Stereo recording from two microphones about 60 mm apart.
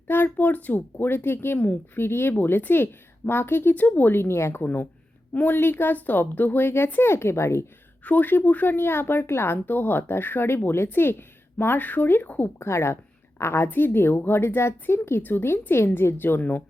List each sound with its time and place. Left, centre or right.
0.1 s speech: left
1.5 s speech: left
2.0 s speech: left
2.3 s speech: left
4.6 s speech: left
8.0 s speech: left
12.5 s speech: left
13.7 s speech: left